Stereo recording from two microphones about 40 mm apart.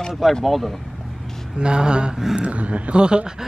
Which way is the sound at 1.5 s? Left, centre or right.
Right.